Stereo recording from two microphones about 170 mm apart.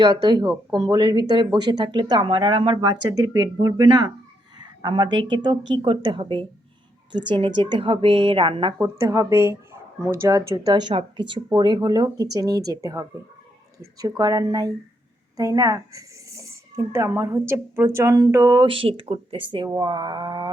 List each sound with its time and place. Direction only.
0.0 s speech: 25° right (ahead or behind)
8.8 s speech: 15° right (ahead or behind)